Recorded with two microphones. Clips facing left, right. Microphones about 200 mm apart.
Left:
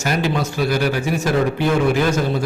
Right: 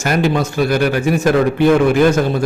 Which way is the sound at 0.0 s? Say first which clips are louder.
Right 4 dB; 55° right (ahead or behind).